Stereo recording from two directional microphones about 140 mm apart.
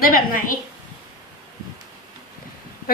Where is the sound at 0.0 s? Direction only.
90° left.